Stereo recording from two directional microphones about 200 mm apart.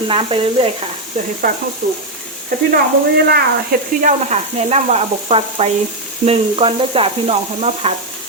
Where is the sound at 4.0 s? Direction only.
35° right (ahead or behind).